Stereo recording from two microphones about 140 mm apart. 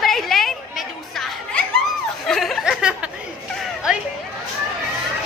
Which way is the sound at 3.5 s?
Centre (ahead or behind).